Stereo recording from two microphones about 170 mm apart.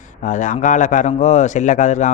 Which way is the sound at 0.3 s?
50° left (ahead or behind).